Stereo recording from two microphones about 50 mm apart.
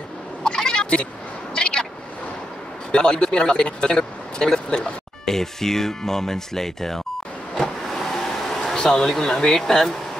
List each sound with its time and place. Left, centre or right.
0.4 s a sound: centre
1.5 s vehicle: centre
2.9 s speech: centre
7.6 s vehicle: centre